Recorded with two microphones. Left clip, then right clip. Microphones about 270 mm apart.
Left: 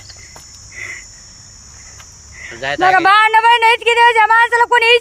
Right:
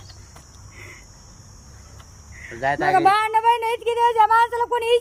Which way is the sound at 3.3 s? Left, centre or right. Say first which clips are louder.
Left 9 dB; left.